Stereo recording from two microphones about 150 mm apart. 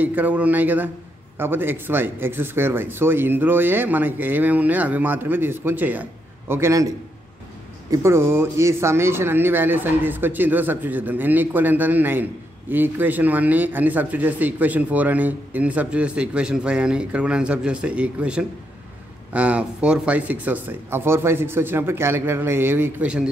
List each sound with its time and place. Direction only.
0.0 s a man's voice: 10° right (ahead or behind)
7.9 s a man's voice: 20° right (ahead or behind)